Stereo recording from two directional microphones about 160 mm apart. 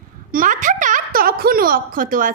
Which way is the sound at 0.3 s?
60° right (ahead or behind).